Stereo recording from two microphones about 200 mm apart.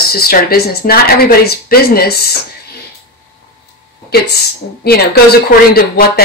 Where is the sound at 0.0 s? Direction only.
50° left (ahead or behind).